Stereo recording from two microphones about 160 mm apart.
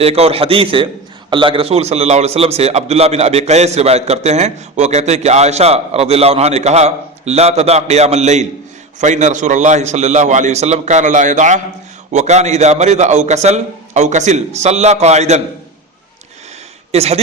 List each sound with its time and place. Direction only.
0.0 s a man's voice: 40° right (ahead or behind)
16.9 s a man's voice: 40° right (ahead or behind)